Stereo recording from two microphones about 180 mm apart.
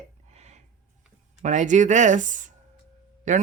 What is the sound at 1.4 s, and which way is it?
Speech, 45° right (ahead or behind).